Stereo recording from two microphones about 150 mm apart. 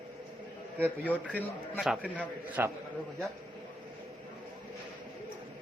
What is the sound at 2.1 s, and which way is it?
Speech, 10° right (ahead or behind).